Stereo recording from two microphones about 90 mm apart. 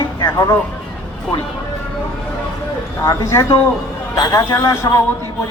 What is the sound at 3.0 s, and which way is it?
A man's voice, 30° left (ahead or behind).